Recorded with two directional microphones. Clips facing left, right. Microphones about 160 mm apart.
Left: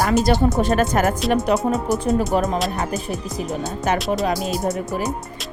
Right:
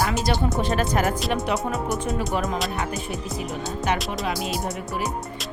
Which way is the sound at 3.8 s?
40° left (ahead or behind).